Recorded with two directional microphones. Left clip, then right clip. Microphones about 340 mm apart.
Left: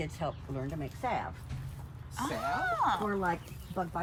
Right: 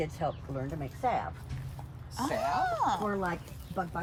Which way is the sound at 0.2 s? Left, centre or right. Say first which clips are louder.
Right 3 dB; right.